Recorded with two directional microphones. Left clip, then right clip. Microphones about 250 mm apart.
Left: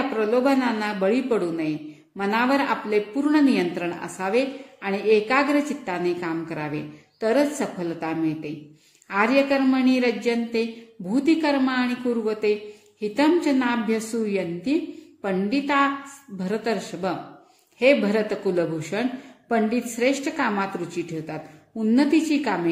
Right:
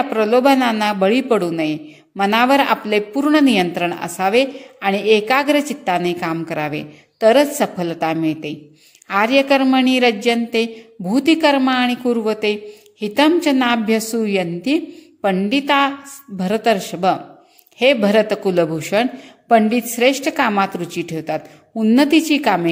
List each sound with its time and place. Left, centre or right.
0.1 s a woman's voice: right